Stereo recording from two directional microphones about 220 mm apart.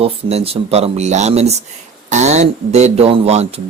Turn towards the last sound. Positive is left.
turn(degrees=-30)  # may be behind; listen again after turning